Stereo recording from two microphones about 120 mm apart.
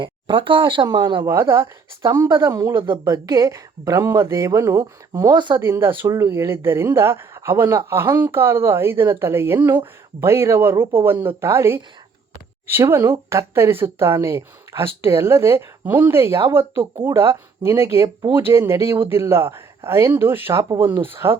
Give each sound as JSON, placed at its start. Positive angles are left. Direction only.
{"t": 0.0, "sound": "speech", "side_deg": -45}
{"t": 1.3, "sound": "a woman's voice", "side_deg": -20}
{"t": 5.3, "sound": "speech", "side_deg": -40}
{"t": 5.5, "sound": "a woman's voice", "side_deg": -20}